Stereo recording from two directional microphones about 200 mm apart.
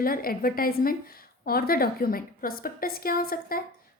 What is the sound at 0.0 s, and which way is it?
A woman's voice, 45° left (ahead or behind).